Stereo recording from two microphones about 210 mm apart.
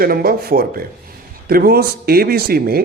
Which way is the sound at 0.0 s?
45° right (ahead or behind).